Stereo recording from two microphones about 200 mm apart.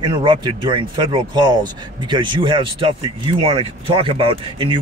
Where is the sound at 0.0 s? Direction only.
25° right (ahead or behind).